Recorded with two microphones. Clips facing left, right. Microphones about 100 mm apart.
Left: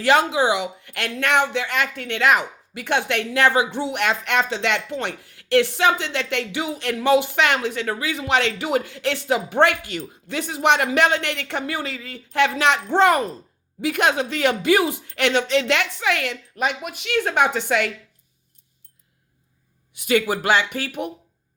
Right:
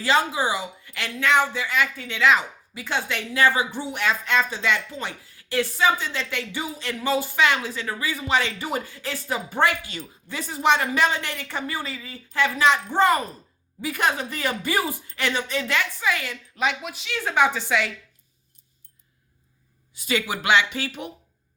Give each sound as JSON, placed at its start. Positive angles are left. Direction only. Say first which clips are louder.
{"t": 0.0, "sound": "a woman's voice", "louder": "left 4 dB", "side_deg": 65}
{"t": 19.9, "sound": "speech", "louder": "left 6 dB", "side_deg": 60}